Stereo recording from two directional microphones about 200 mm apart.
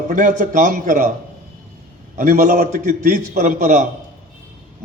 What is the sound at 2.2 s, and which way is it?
A man's voice, 45° right (ahead or behind).